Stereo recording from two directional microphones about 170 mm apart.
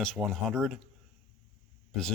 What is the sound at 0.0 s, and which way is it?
Speech, centre (ahead or behind).